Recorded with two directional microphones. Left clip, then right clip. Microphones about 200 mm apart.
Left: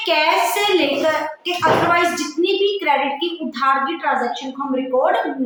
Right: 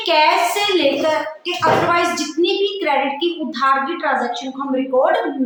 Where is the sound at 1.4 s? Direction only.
5° left (ahead or behind).